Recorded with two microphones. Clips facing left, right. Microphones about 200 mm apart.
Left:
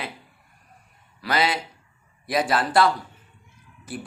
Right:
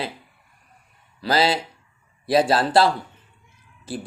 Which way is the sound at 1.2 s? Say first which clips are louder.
Right 4 dB; 30° right (ahead or behind).